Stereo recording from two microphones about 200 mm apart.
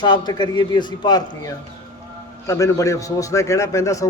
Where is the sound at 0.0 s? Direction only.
20° left (ahead or behind).